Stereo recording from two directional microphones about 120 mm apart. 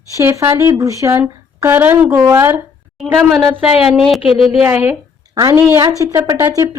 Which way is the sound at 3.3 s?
Centre (ahead or behind).